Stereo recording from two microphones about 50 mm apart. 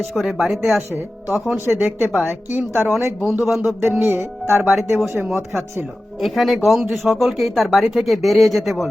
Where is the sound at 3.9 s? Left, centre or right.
Right.